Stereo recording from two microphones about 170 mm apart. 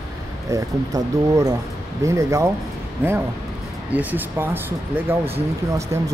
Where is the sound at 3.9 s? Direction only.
10° right (ahead or behind).